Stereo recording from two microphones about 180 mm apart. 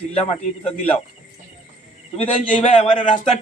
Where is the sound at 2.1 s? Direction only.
35° left (ahead or behind).